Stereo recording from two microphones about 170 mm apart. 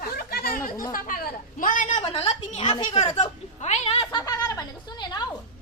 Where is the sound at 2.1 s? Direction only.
40° left (ahead or behind).